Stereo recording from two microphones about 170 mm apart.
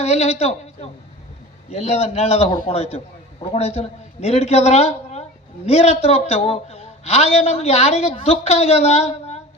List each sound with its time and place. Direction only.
0.0 s a man's voice: 40° left (ahead or behind)